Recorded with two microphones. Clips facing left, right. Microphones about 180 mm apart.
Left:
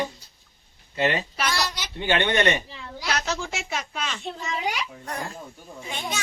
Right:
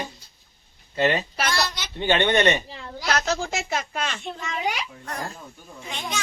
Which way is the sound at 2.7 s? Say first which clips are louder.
Right 3 dB; 45° right (ahead or behind).